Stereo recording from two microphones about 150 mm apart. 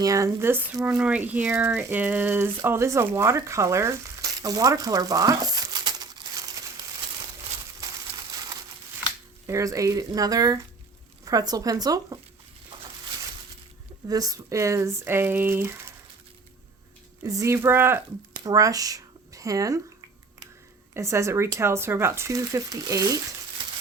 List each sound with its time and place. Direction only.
0.0 s speech: 20° right (ahead or behind)
7.8 s crushing: 25° right (ahead or behind)
9.5 s speech: 20° right (ahead or behind)
14.1 s speech: 25° right (ahead or behind)
17.2 s speech: 20° right (ahead or behind)
20.9 s speech: 20° right (ahead or behind)